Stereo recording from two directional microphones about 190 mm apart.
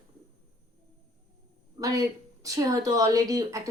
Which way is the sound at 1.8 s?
20° right (ahead or behind).